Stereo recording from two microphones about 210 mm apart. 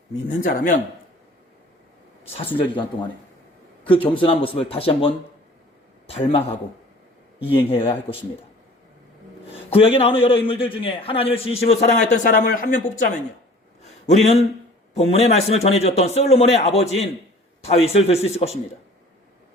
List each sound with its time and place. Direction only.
0.3 s speech: 40° left (ahead or behind)
2.4 s a man's voice: 25° left (ahead or behind)
4.2 s a man's voice: 25° left (ahead or behind)
6.1 s a man's voice: 25° left (ahead or behind)
7.6 s a man's voice: 25° left (ahead or behind)
9.6 s a man's voice: 25° left (ahead or behind)
13.8 s a sound: 30° left (ahead or behind)
14.9 s a man's voice: 30° left (ahead or behind)